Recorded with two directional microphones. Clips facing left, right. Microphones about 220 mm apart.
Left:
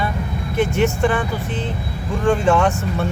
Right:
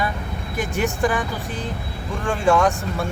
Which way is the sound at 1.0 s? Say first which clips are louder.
Left 3 dB; centre (ahead or behind).